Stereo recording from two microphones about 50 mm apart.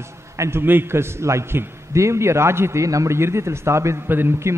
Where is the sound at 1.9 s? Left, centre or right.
Right.